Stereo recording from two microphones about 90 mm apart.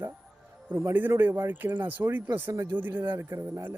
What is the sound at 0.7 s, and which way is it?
Speech, 25° right (ahead or behind).